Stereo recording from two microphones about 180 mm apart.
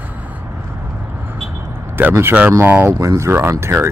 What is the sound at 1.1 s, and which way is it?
Vehicle, 10° right (ahead or behind).